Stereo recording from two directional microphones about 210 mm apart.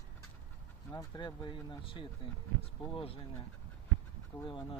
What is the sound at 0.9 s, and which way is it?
Speech, 20° left (ahead or behind).